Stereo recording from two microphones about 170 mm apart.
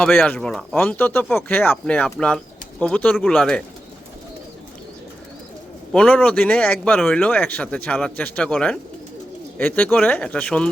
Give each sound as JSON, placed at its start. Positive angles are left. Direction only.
{"t": 0.0, "sound": "speech", "side_deg": 5}
{"t": 5.9, "sound": "speech", "side_deg": 5}